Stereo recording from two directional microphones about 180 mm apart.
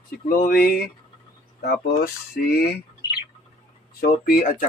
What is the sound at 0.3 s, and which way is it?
Speech, 50° left (ahead or behind).